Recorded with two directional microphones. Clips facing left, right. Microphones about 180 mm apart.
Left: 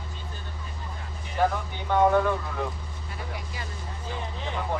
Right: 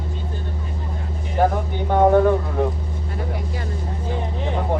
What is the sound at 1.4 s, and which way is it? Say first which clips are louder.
Speech: right 6 dB; 45° right (ahead or behind).